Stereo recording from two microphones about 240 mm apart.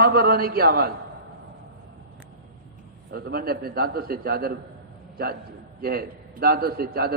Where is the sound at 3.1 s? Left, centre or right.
Right.